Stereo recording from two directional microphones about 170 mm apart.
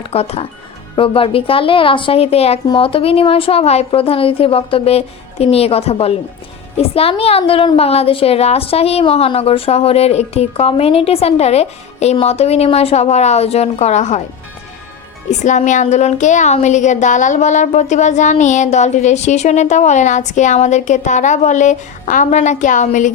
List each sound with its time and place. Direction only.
0.1 s a woman's voice: 35° left (ahead or behind)
15.3 s a woman's voice: 45° left (ahead or behind)